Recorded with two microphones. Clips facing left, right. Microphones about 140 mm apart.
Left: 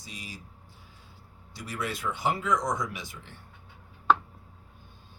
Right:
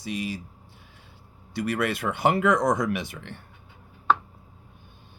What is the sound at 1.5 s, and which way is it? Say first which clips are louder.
Speech: right 9 dB; 65° right (ahead or behind).